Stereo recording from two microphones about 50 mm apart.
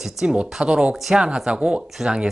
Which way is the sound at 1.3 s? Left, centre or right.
Centre.